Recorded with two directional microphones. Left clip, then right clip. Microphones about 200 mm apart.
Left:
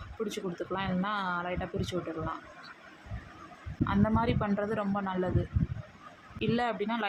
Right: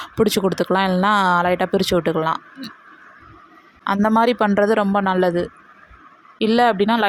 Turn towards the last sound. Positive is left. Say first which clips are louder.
# right 15 dB
turn(degrees=-50)  # may be behind; listen again after turning